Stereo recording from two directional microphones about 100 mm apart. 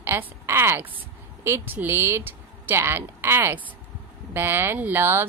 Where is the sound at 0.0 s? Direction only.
25° right (ahead or behind).